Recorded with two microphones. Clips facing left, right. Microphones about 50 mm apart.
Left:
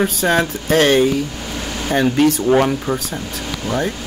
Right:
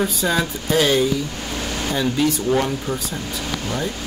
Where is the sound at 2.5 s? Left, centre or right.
Left.